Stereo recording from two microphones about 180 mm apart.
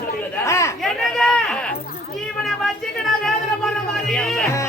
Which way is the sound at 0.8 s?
5° left (ahead or behind).